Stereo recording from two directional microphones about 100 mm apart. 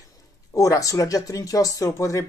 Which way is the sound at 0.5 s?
35° left (ahead or behind).